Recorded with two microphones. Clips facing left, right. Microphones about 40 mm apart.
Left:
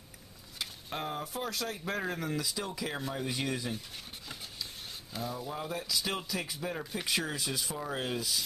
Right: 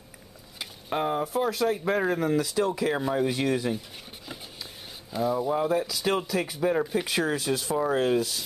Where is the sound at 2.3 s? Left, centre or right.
Right.